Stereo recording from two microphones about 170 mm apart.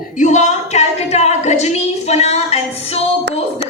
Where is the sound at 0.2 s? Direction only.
45° left (ahead or behind).